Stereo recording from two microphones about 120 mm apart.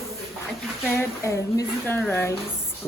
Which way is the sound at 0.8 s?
20° left (ahead or behind).